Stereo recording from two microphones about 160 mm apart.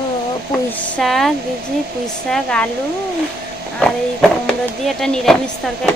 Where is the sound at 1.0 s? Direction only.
Centre (ahead or behind).